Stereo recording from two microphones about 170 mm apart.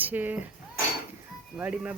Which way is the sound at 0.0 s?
10° right (ahead or behind).